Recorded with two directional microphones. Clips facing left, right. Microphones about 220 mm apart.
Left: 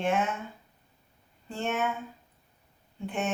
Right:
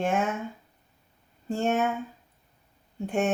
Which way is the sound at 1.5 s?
45° right (ahead or behind).